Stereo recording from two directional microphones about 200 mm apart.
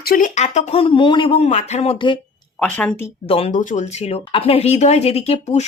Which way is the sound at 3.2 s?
30° left (ahead or behind).